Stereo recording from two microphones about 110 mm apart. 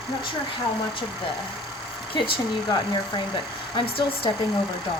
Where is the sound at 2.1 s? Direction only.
50° left (ahead or behind).